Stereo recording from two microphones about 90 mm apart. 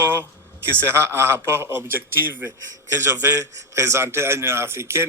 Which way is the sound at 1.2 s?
25° right (ahead or behind).